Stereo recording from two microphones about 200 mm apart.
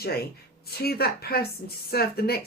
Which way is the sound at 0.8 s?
50° left (ahead or behind).